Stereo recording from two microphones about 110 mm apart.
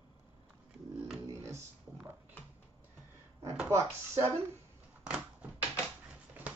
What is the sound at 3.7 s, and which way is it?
Speech, 25° right (ahead or behind).